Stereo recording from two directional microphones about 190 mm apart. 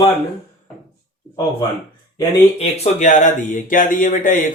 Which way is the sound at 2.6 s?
40° left (ahead or behind).